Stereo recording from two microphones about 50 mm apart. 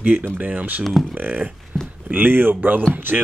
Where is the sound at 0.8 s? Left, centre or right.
Centre.